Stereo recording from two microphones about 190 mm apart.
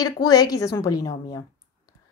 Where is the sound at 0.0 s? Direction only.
20° left (ahead or behind).